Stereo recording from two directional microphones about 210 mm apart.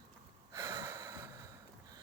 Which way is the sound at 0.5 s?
15° right (ahead or behind).